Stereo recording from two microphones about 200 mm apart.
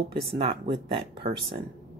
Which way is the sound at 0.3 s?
25° right (ahead or behind).